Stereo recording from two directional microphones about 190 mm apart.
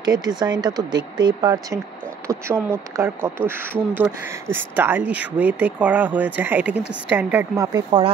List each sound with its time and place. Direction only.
0.0 s speech: 20° right (ahead or behind)